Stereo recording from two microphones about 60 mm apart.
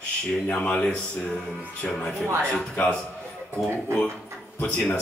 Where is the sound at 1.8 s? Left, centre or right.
Centre.